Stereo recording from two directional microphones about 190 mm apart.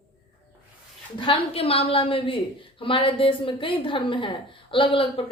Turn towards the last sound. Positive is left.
turn(degrees=30)  # may be behind; listen again after turning